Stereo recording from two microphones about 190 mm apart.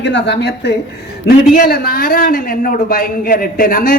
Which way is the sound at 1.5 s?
50° left (ahead or behind).